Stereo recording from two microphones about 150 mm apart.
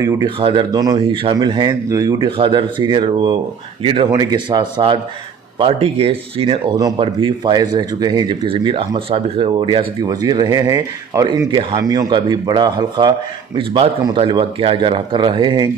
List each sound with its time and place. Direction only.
0.4 s speech: 35° right (ahead or behind)
4.1 s speech: 25° right (ahead or behind)